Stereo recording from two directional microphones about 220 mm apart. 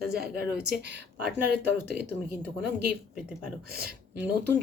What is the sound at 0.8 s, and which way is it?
Speech, 50° right (ahead or behind).